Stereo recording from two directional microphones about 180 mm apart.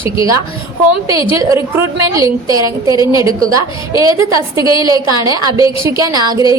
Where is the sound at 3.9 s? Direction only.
25° left (ahead or behind).